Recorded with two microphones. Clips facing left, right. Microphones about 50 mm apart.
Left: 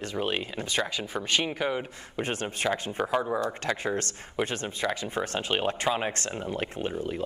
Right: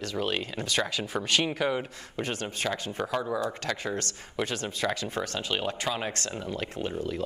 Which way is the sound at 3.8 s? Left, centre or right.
Left.